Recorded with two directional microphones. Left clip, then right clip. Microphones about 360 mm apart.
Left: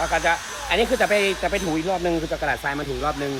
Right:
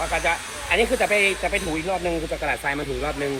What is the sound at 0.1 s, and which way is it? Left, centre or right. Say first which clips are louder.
Speech: left 2 dB; left.